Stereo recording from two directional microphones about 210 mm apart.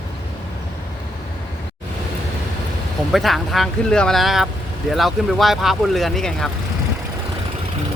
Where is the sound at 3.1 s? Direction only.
Centre (ahead or behind).